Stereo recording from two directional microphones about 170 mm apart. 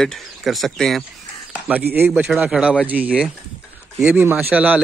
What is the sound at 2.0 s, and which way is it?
Speech, 10° right (ahead or behind).